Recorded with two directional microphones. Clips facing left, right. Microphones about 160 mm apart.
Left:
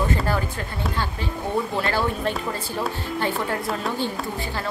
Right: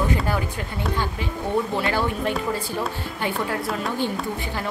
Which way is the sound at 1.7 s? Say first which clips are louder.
Even; 15° right (ahead or behind).